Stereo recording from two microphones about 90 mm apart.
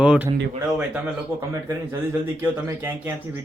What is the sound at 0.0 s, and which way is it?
Speech, 10° right (ahead or behind).